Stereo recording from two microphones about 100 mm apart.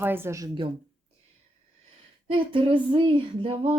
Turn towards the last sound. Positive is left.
turn(degrees=-75)  # may be behind; listen again after turning